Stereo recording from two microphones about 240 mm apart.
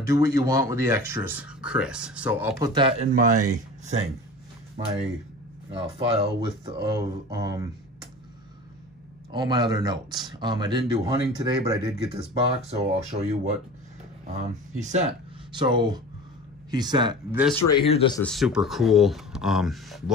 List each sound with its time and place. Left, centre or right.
0.0 s speech: centre
2.7 s speech: right
3.1 s speech: right
5.7 s speech: right
9.3 s speech: centre
14.8 s speech: right
15.5 s speech: centre
17.6 s speech: centre
18.2 s speech: centre